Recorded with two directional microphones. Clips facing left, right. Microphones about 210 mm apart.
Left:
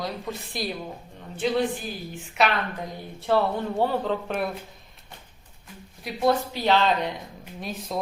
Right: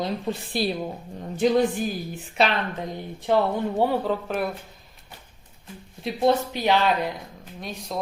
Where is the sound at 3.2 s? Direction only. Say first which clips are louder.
Right 1 dB; 15° right (ahead or behind).